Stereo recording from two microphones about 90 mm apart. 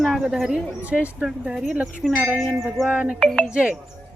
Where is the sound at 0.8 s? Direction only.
15° right (ahead or behind); by 2.5 s centre (ahead or behind).